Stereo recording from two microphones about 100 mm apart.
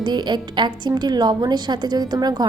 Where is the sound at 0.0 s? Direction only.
50° right (ahead or behind).